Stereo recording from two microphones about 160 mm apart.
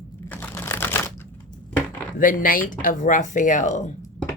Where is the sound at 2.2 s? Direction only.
60° left (ahead or behind).